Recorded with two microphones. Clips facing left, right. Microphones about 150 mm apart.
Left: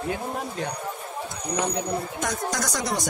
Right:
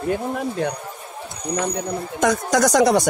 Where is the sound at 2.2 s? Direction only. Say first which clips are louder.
Right 10 dB; 90° right.